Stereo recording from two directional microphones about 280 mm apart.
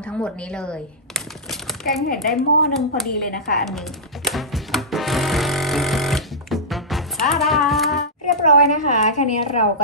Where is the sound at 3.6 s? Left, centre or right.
Centre.